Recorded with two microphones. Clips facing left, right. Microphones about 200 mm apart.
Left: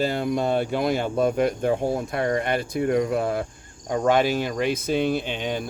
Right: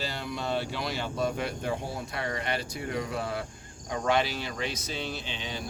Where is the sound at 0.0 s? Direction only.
50° left (ahead or behind).